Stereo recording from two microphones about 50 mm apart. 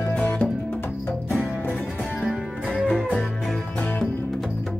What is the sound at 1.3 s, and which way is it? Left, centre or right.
Music, right.